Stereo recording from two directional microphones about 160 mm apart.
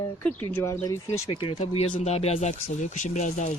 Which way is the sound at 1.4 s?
35° left (ahead or behind).